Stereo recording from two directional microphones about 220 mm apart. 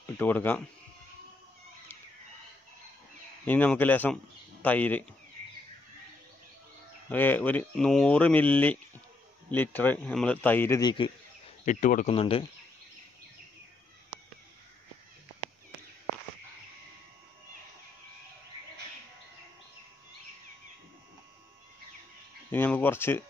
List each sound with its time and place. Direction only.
0.2 s speech: 10° left (ahead or behind)
3.4 s speech: 10° left (ahead or behind)
7.1 s speech: 10° left (ahead or behind)
11.6 s speech: 35° left (ahead or behind)
12.1 s speech: 25° left (ahead or behind)
22.5 s a sound: 10° left (ahead or behind)